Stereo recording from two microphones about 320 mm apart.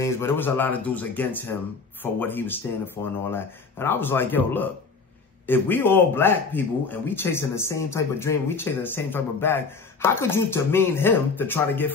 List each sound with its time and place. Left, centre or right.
0.0 s speech: centre